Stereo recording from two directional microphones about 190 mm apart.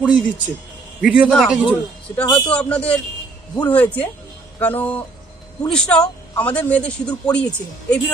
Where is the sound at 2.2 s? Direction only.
20° left (ahead or behind).